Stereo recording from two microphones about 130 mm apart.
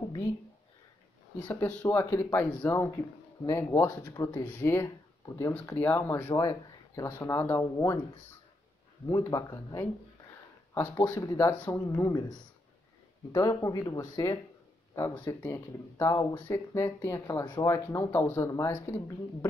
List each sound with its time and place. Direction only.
1.5 s speech: 10° left (ahead or behind)
1.9 s speech: 25° left (ahead or behind)
4.6 s speech: 20° left (ahead or behind)
9.0 s speech: 30° left (ahead or behind)
11.0 s speech: 30° left (ahead or behind)
15.1 s speech: 15° left (ahead or behind)